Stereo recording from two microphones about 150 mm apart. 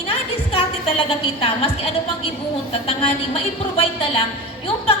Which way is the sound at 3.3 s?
40° left (ahead or behind).